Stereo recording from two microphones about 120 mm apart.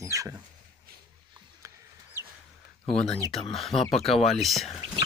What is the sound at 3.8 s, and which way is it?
Speech, 55° left (ahead or behind).